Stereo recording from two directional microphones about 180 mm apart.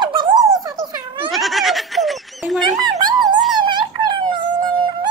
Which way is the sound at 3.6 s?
25° right (ahead or behind).